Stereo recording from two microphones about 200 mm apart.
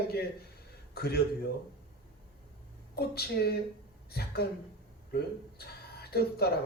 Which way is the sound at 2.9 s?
55° left (ahead or behind).